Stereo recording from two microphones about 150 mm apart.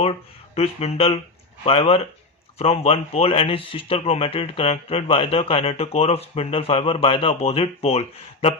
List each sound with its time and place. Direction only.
0.0 s speech: 40° left (ahead or behind)